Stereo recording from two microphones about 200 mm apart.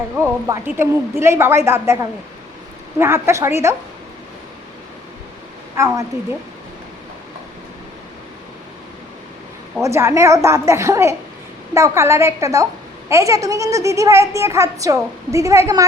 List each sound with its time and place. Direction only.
0.2 s a woman's voice: 15° right (ahead or behind)
5.7 s a woman's voice: 15° right (ahead or behind)
9.8 s a woman's voice: 15° right (ahead or behind)